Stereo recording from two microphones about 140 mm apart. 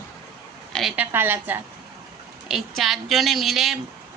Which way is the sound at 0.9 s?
15° right (ahead or behind).